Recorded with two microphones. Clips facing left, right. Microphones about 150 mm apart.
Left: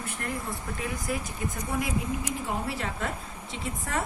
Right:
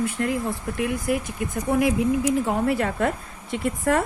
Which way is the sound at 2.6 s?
55° right (ahead or behind).